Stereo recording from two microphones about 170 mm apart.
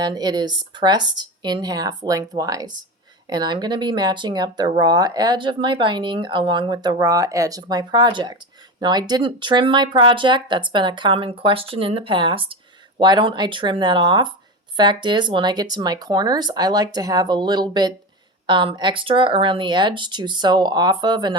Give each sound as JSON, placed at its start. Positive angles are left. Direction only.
{"t": 0.0, "sound": "speech", "side_deg": -25}